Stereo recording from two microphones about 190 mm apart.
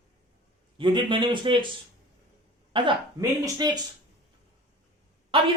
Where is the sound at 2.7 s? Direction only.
20° right (ahead or behind).